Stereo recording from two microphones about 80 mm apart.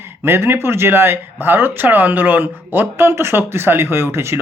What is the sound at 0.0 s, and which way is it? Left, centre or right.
Speech, right.